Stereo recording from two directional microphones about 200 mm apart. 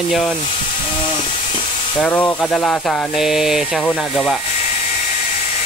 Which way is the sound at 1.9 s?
5° left (ahead or behind).